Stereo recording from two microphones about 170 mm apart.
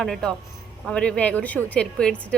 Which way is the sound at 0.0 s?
5° left (ahead or behind).